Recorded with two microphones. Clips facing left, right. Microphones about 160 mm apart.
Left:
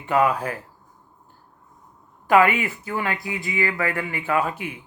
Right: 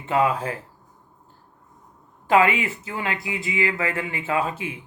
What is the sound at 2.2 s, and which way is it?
Speech, 25° right (ahead or behind).